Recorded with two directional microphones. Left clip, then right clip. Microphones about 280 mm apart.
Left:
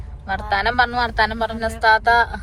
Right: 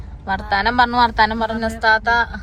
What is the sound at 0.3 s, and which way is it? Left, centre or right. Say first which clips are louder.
Speech: right 2 dB; centre.